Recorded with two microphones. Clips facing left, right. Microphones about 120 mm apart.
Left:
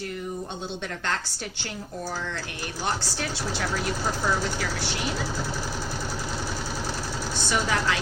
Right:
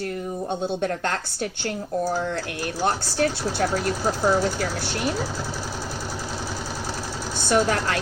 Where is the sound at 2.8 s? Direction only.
50° right (ahead or behind).